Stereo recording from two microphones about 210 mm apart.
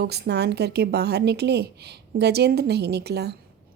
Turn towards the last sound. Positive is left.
turn(degrees=-50)  # may be behind; listen again after turning